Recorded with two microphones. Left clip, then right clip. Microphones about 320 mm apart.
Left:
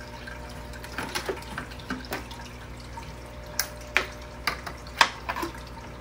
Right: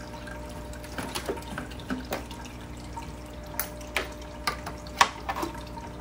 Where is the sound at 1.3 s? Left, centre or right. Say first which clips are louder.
Left 1 dB; centre.